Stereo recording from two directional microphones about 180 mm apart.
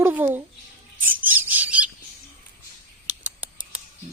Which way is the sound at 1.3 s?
10° right (ahead or behind).